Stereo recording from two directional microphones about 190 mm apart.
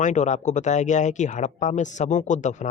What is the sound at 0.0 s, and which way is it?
Speech, 40° left (ahead or behind).